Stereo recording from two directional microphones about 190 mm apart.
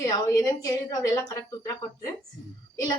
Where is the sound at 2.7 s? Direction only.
20° left (ahead or behind).